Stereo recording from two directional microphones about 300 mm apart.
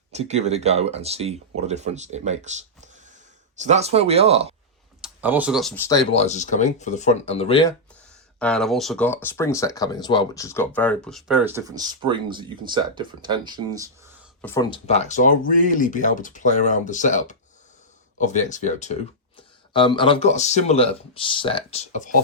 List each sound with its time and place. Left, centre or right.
0.1 s speech: right
4.9 s speech: centre
6.1 s speech: left
8.4 s speech: centre
14.4 s speech: centre